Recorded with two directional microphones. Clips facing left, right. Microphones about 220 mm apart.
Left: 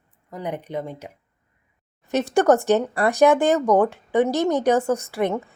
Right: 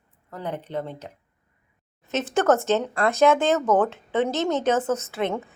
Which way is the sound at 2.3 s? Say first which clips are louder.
Left 3 dB; 15° left (ahead or behind).